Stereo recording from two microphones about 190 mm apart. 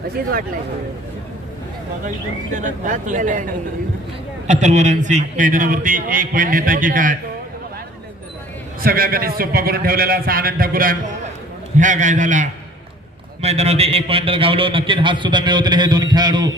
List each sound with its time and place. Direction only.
2.5 s a man's voice: 40° right (ahead or behind)
8.8 s a man's voice: 50° right (ahead or behind); by 16.5 s 20° right (ahead or behind)